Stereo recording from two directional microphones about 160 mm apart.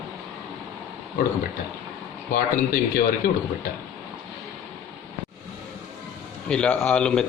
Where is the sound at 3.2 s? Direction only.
70° left (ahead or behind).